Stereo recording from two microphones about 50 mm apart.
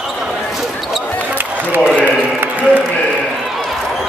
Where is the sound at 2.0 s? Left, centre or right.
Right.